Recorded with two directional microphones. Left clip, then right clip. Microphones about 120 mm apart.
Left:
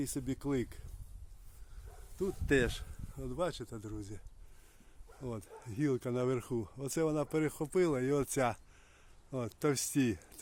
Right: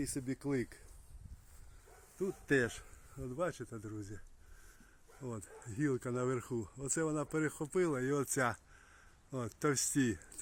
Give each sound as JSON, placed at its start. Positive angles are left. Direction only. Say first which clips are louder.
{"t": 0.0, "sound": "speech", "louder": "left 2 dB", "side_deg": 15}
{"t": 2.5, "sound": "speech", "louder": "left 2 dB", "side_deg": 15}
{"t": 5.2, "sound": "speech", "louder": "left 2 dB", "side_deg": 15}
{"t": 9.6, "sound": "speech", "louder": "left 1 dB", "side_deg": 10}